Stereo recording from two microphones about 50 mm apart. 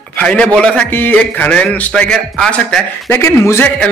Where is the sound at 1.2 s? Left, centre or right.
Left.